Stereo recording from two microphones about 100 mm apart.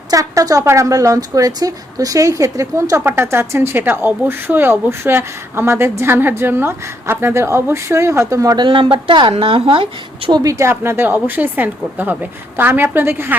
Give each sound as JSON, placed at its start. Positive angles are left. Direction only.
{"t": 0.1, "sound": "speech", "side_deg": -35}
{"t": 8.5, "sound": "speech", "side_deg": -55}
{"t": 9.3, "sound": "speech", "side_deg": -65}
{"t": 10.3, "sound": "speech", "side_deg": -35}